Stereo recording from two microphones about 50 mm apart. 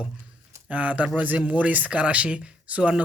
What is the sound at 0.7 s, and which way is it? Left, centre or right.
Speech, right.